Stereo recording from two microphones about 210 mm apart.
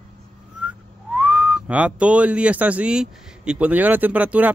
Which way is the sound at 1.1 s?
5° right (ahead or behind).